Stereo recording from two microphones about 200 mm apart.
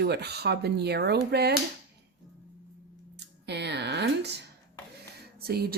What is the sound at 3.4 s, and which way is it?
Speech, 60° right (ahead or behind).